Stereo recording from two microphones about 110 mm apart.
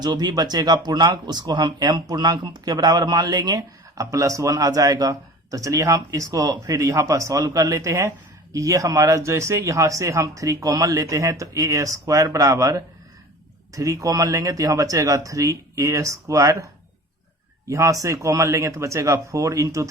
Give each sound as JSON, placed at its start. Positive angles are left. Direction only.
{"t": 0.0, "sound": "speech", "side_deg": -40}
{"t": 17.7, "sound": "speech", "side_deg": -25}